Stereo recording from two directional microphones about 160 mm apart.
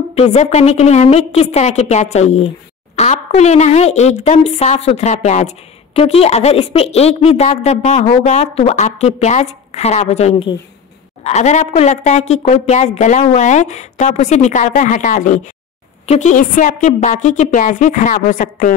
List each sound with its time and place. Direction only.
0.1 s a woman's voice: 40° left (ahead or behind)